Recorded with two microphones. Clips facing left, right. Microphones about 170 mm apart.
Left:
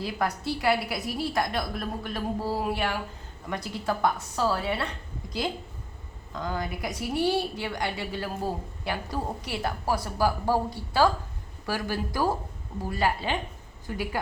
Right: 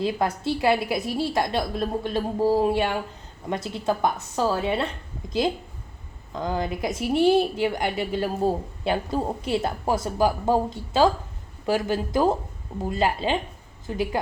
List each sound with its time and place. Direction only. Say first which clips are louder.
0.0 s a woman's voice: right 5 dB; 20° right (ahead or behind)